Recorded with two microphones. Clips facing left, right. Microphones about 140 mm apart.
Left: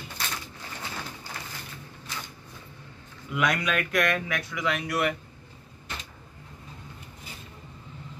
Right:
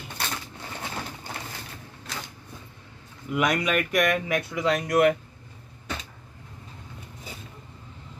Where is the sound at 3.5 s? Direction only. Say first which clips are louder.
Right 3 dB; 10° right (ahead or behind).